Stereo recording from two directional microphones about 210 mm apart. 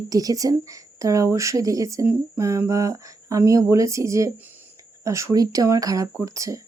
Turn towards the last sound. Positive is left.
turn(degrees=-15)  # may be behind; listen again after turning